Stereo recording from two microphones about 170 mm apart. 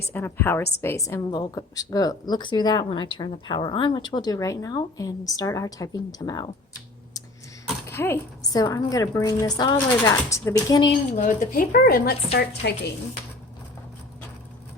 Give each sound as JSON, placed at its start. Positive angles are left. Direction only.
{"t": 0.1, "sound": "a woman's voice", "side_deg": 10}
{"t": 7.9, "sound": "a woman's voice", "side_deg": 15}
{"t": 11.2, "sound": "a woman's voice", "side_deg": 55}